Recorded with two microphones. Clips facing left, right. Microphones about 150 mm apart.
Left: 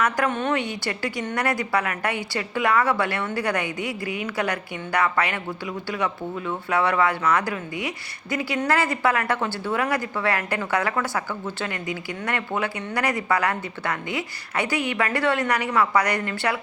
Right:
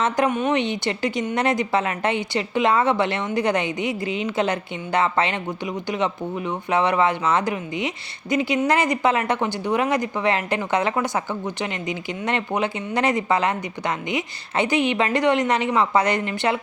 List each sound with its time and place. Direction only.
0.3 s a woman's voice: 10° right (ahead or behind)